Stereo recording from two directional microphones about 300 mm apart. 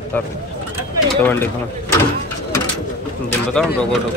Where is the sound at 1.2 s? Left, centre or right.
Centre.